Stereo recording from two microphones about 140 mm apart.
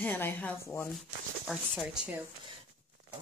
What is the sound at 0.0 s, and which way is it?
Speech, 15° left (ahead or behind).